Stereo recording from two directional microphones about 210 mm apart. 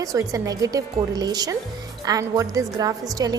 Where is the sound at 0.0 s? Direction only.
15° right (ahead or behind).